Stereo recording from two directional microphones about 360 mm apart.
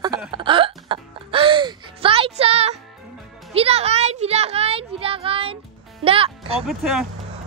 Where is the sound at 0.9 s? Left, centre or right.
Centre.